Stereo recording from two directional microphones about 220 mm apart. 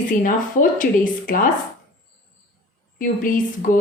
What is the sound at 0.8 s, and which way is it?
Speech, 40° left (ahead or behind).